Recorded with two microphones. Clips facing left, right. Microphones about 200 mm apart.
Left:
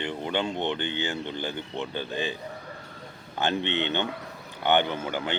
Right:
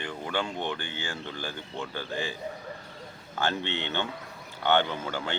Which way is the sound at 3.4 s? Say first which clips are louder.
Left 3 dB; 20° left (ahead or behind).